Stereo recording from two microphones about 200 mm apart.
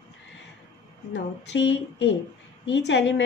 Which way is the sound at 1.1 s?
65° left (ahead or behind).